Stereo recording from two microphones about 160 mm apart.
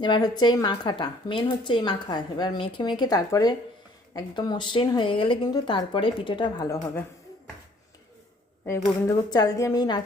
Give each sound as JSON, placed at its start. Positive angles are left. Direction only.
{"t": 0.0, "sound": "a woman's voice", "side_deg": 30}
{"t": 8.6, "sound": "a woman's voice", "side_deg": 20}